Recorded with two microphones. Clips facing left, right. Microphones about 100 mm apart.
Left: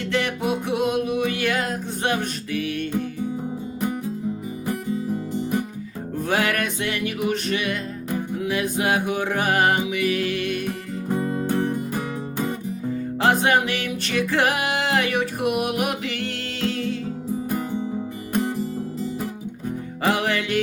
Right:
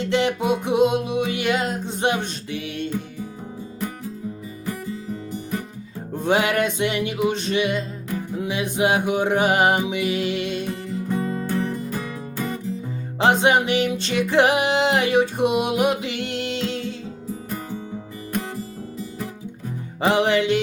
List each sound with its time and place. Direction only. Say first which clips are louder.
0.0 s music: right 3 dB; 20° right (ahead or behind)
4.6 s music: left 4 dB; 20° left (ahead or behind)
6.2 s music: right 4 dB; 20° right (ahead or behind)
13.1 s music: right 2 dB; 20° right (ahead or behind)
20.0 s music: right 4 dB; 20° right (ahead or behind)